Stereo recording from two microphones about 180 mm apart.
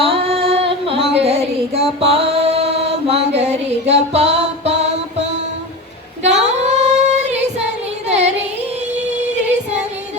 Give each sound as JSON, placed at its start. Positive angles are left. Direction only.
{"t": 0.0, "sound": "singing", "side_deg": -30}
{"t": 1.2, "sound": "female singing", "side_deg": -35}
{"t": 8.0, "sound": "music", "side_deg": -40}